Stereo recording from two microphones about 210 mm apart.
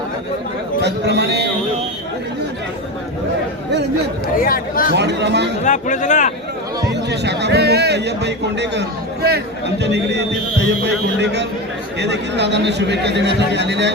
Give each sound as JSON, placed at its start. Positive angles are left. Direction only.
{"t": 0.8, "sound": "a man's voice", "side_deg": -55}
{"t": 4.4, "sound": "speech", "side_deg": 40}
{"t": 4.9, "sound": "speech", "side_deg": -55}
{"t": 5.6, "sound": "speech", "side_deg": 35}
{"t": 6.9, "sound": "a man's voice", "side_deg": -55}